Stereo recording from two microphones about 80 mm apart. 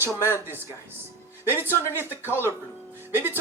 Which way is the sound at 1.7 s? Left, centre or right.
Left.